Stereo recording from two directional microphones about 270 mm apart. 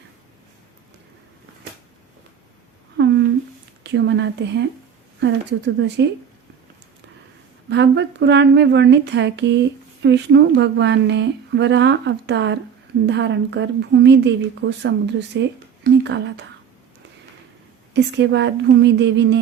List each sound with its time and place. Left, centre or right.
3.0 s a sound: right
3.8 s speech: right
7.7 s speech: right
17.9 s speech: right